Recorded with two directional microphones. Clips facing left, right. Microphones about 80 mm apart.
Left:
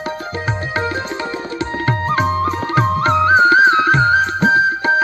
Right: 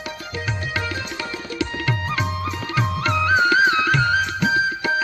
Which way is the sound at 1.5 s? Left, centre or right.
Left.